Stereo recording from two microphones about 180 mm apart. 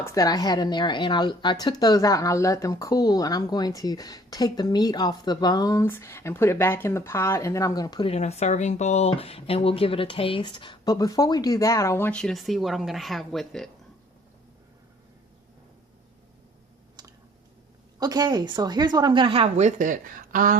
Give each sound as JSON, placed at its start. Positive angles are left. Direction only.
{"t": 0.0, "sound": "a woman's voice", "side_deg": 20}
{"t": 8.0, "sound": "a woman's voice", "side_deg": 35}
{"t": 17.0, "sound": "typing", "side_deg": -20}
{"t": 18.0, "sound": "a woman's voice", "side_deg": -20}